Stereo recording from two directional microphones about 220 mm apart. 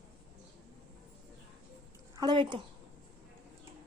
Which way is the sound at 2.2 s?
20° right (ahead or behind).